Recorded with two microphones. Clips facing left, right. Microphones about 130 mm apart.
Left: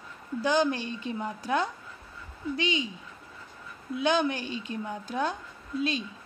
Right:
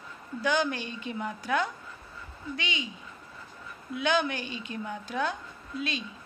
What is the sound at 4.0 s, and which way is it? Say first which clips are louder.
A woman's voice: left 2 dB; 35° left (ahead or behind).